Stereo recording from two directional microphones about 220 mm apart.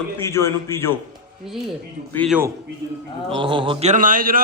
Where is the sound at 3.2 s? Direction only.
25° right (ahead or behind); by 4.3 s 40° right (ahead or behind).